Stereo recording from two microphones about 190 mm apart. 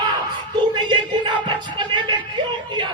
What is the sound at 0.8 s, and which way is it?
Music, 25° right (ahead or behind).